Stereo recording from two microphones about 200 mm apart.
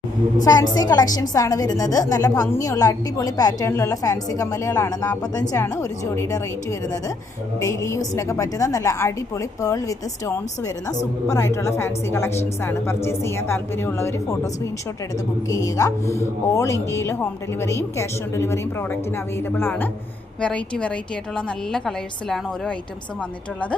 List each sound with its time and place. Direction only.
0.4 s a woman's voice: 20° left (ahead or behind)
15.4 s a woman's voice: 15° left (ahead or behind)